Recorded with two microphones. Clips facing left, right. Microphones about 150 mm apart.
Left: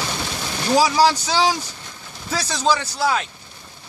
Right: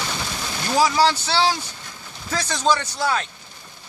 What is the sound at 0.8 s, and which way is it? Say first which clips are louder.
A man's voice: left 1 dB; 10° left (ahead or behind).